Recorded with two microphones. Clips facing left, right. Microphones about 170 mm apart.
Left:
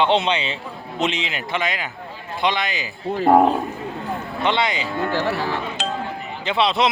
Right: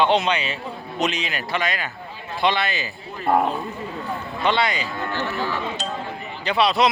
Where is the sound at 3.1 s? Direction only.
70° left (ahead or behind).